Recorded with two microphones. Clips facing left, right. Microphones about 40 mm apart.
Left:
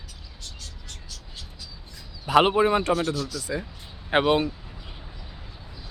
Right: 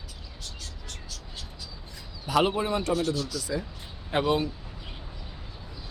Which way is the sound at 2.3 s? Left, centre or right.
Left.